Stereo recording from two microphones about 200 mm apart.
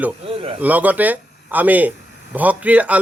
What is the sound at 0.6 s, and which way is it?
Speech, 10° right (ahead or behind).